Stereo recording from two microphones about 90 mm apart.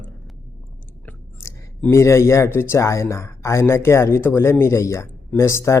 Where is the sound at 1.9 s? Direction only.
30° left (ahead or behind).